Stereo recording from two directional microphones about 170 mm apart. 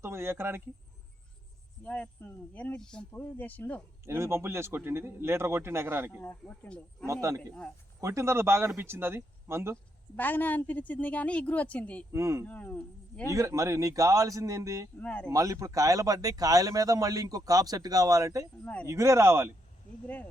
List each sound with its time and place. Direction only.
0.0 s a man's voice: 15° right (ahead or behind)
1.8 s speech: 10° left (ahead or behind)
4.0 s a man's voice: 15° right (ahead or behind)
6.2 s speech: 10° left (ahead or behind)
7.1 s a man's voice: 20° right (ahead or behind)
10.2 s speech: 10° left (ahead or behind)
12.1 s a man's voice: 15° right (ahead or behind)
12.5 s speech: 10° left (ahead or behind)
13.3 s speech: 20° right (ahead or behind)
15.0 s speech: 5° left (ahead or behind)
15.3 s speech: 20° right (ahead or behind)
18.6 s speech: 10° left (ahead or behind)
18.9 s a man's voice: 15° right (ahead or behind)